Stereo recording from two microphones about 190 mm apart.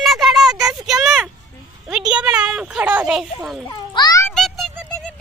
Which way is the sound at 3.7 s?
20° left (ahead or behind).